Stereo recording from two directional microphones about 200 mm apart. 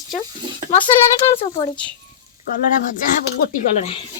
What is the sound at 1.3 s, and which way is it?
Speech, 30° left (ahead or behind).